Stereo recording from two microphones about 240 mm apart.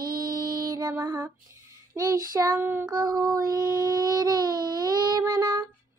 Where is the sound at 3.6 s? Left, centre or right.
Centre.